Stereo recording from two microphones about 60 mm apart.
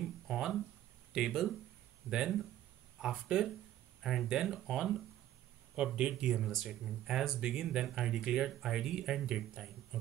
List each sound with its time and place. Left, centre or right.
0.0 s a sound: centre
1.3 s speech: centre
2.0 s speech: centre
5.9 s speech: centre
6.3 s speech: centre